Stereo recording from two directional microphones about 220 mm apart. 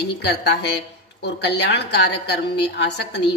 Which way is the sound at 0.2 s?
50° left (ahead or behind).